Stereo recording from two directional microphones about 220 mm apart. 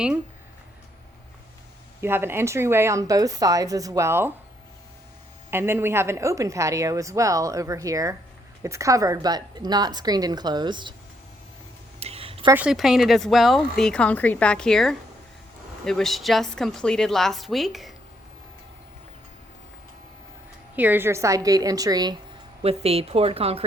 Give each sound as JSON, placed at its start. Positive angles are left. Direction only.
{"t": 2.0, "sound": "a woman's voice", "side_deg": -10}
{"t": 5.5, "sound": "a woman's voice", "side_deg": -10}
{"t": 11.9, "sound": "a sound", "side_deg": -25}
{"t": 12.5, "sound": "speech", "side_deg": -5}
{"t": 20.7, "sound": "a woman's voice", "side_deg": -10}